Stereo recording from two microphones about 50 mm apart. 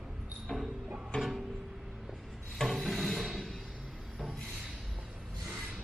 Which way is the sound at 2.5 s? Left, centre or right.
Centre.